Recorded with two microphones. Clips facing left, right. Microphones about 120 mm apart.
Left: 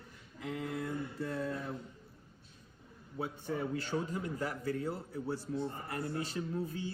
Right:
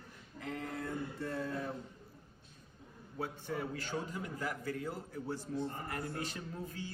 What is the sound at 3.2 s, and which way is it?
Speech, 30° left (ahead or behind).